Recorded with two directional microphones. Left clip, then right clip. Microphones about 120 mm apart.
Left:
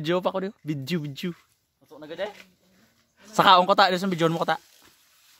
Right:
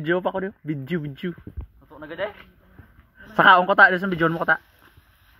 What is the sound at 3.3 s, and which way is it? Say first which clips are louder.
Speech: right 2 dB; 40° left (ahead or behind).